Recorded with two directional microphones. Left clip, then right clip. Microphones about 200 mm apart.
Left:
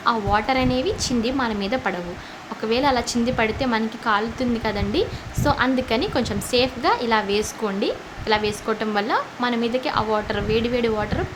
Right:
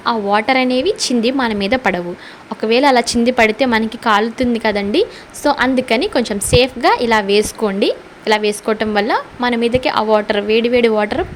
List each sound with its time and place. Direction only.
0.0 s a woman's voice: 25° right (ahead or behind)